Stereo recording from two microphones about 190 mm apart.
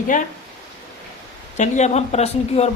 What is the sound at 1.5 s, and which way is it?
Speech, 40° left (ahead or behind).